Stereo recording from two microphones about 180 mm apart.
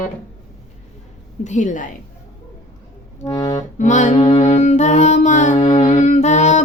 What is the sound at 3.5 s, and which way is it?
Music, 40° left (ahead or behind).